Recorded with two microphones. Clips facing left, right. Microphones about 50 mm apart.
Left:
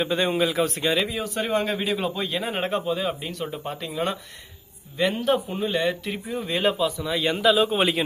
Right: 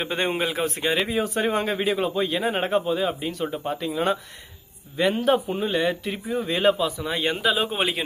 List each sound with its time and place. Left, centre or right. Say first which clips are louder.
0.0 s speech: left 2 dB; right; by 7.1 s centre
7.1 s a man's voice: left 4 dB; right
7.8 s speech: left 3 dB; centre